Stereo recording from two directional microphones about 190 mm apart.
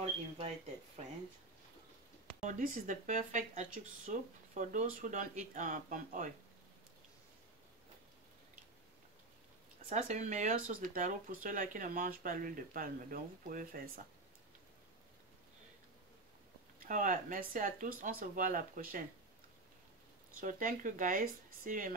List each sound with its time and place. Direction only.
2.4 s speech: 45° right (ahead or behind)
9.8 s speech: 40° right (ahead or behind)
16.8 s speech: 45° right (ahead or behind)
20.3 s speech: 45° right (ahead or behind)